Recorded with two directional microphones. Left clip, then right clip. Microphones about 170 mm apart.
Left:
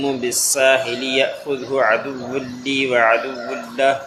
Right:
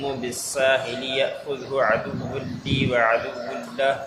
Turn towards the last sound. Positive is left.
turn(degrees=35)  # may be behind; listen again after turning